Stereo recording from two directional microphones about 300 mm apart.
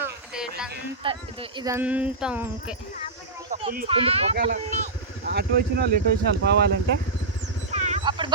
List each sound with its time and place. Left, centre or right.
0.0 s a sound: centre
1.0 s speech: centre
3.5 s speech: right
7.7 s dog: right